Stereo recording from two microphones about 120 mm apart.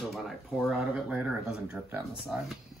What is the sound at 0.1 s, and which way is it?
Speech, centre (ahead or behind).